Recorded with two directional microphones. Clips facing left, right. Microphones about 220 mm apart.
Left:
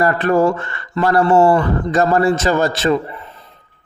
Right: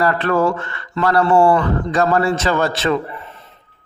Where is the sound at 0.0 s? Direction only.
15° left (ahead or behind).